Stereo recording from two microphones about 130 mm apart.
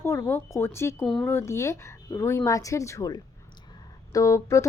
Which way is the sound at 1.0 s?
5° left (ahead or behind).